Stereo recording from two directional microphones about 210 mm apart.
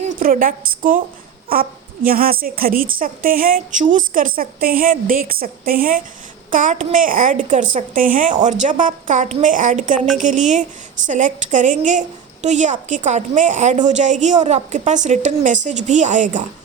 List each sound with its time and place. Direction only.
0.0 s a woman's voice: 40° right (ahead or behind)